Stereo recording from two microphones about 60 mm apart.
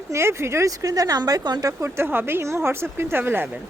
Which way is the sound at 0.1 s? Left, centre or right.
Right.